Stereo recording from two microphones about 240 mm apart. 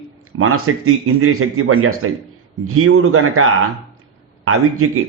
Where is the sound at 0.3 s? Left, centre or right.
Right.